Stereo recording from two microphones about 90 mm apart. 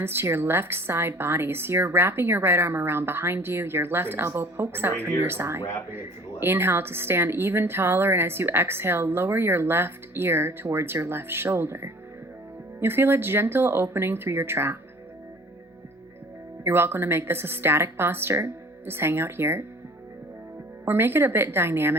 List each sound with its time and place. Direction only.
0.0 s a woman's voice: 25° right (ahead or behind)
16.6 s a woman's voice: 25° right (ahead or behind)
20.8 s a woman's voice: 25° right (ahead or behind)